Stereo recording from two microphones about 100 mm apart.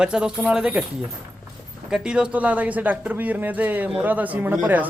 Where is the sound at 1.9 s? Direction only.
10° right (ahead or behind).